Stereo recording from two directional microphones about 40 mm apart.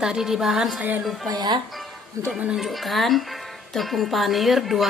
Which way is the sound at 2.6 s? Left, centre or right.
Centre.